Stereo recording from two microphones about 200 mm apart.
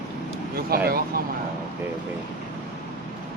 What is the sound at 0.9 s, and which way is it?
Speech, 50° right (ahead or behind).